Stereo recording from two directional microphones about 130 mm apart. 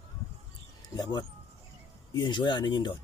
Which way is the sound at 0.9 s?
30° left (ahead or behind).